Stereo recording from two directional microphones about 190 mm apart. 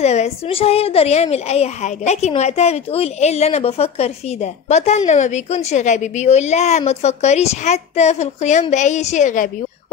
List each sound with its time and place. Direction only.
0.0 s a woman's voice: 35° left (ahead or behind)